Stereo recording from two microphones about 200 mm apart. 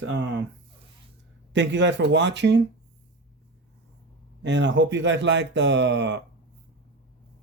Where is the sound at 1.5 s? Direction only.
65° right (ahead or behind).